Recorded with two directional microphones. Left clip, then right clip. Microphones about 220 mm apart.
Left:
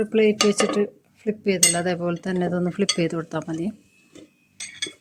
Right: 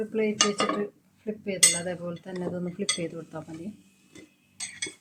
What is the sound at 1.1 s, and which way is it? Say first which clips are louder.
Cutlery: left 11 dB; 45° left (ahead or behind).